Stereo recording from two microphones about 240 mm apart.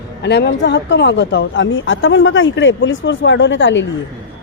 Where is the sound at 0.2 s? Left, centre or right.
Left.